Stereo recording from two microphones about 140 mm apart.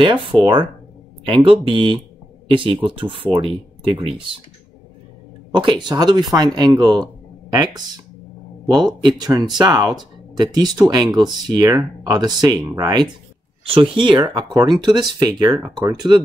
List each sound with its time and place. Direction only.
0.0 s speech: 35° right (ahead or behind)
5.6 s speech: 30° right (ahead or behind)
13.7 s speech: 35° right (ahead or behind)